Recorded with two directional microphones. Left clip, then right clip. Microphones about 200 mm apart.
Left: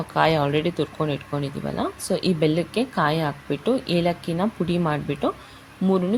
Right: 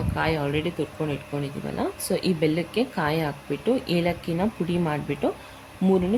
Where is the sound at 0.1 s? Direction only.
25° left (ahead or behind).